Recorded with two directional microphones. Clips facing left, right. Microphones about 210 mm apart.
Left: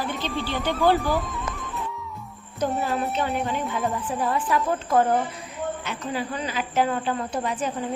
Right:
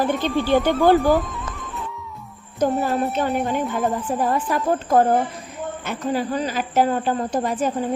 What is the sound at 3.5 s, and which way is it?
Speech, 45° right (ahead or behind).